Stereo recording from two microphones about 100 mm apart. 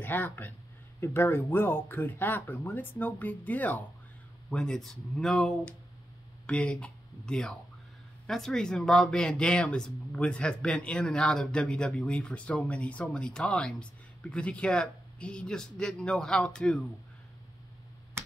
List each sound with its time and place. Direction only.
0.0 s speech: 20° left (ahead or behind)